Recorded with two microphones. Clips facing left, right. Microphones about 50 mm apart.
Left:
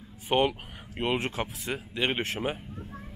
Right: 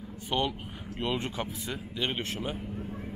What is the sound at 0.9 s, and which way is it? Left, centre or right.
Speech, centre.